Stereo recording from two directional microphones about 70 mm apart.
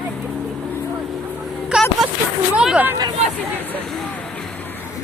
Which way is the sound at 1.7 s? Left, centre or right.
Centre.